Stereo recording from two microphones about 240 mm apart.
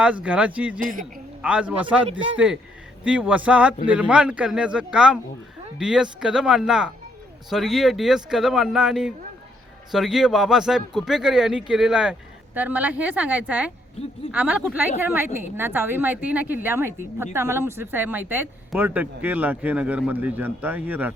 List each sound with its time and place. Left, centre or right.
0.0 s speech: centre
0.8 s speech: right
1.4 s speech: centre
3.0 s speech: centre